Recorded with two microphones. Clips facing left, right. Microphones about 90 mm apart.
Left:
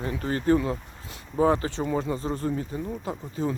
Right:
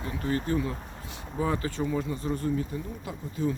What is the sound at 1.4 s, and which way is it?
Speech, 35° left (ahead or behind).